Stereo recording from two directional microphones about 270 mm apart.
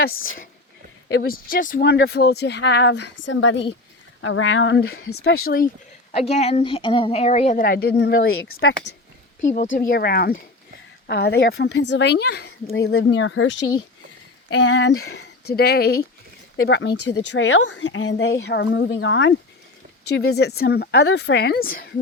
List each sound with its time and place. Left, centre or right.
1.1 s speech: left
6.1 s a woman's voice: left
8.4 s speech: left
9.7 s speech: left